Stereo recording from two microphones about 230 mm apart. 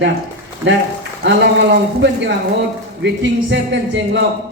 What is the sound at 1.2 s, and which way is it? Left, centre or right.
A man's voice, right.